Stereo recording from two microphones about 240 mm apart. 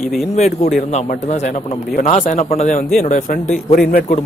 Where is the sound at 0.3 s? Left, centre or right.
Left.